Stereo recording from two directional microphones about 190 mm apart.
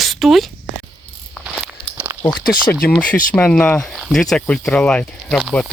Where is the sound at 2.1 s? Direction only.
15° right (ahead or behind).